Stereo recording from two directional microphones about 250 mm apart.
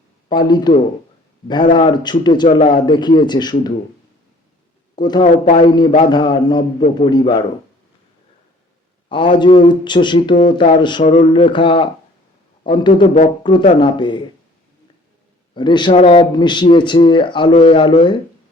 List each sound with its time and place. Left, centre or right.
0.3 s a man's voice: centre
1.7 s a man's voice: centre
4.9 s a man's voice: centre
5.2 s speech: left
6.1 s a man's voice: centre
9.0 s speech: centre
11.0 s speech: left
11.3 s a man's voice: centre
13.0 s speech: left
13.7 s a man's voice: centre
15.5 s speech: centre